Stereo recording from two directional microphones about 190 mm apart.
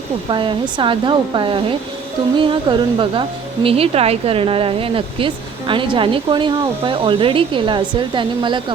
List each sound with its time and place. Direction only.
0.3 s speech: 25° right (ahead or behind)